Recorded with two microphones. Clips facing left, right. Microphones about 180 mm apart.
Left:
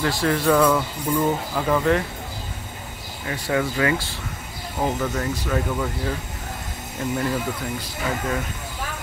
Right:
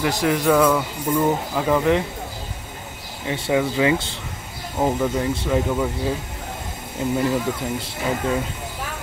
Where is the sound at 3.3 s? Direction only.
15° right (ahead or behind).